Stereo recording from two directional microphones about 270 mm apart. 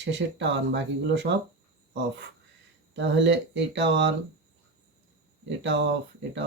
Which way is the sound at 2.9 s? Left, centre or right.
Right.